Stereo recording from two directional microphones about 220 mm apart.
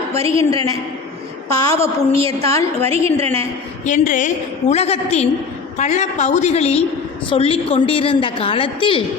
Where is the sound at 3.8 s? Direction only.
35° left (ahead or behind).